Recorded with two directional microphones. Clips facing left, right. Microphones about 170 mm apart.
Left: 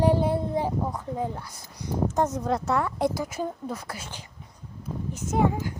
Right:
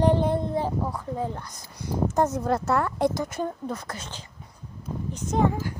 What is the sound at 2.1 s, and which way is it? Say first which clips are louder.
A woman's voice: right 3 dB; 10° right (ahead or behind).